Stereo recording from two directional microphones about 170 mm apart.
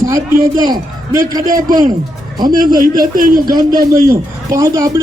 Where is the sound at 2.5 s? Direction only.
55° right (ahead or behind).